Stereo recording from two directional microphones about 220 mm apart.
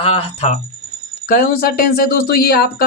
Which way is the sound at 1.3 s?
45° left (ahead or behind).